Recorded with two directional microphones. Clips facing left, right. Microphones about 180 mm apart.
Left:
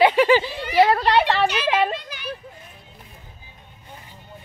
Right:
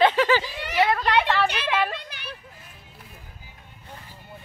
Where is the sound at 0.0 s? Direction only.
15° left (ahead or behind).